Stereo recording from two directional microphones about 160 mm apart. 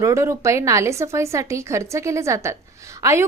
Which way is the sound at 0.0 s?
20° right (ahead or behind).